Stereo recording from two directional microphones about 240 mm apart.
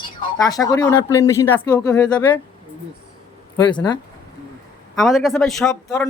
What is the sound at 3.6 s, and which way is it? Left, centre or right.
Speech, centre.